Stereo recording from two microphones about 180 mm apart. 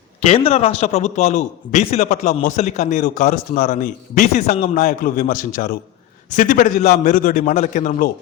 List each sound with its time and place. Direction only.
0.2 s a man's voice: 35° left (ahead or behind)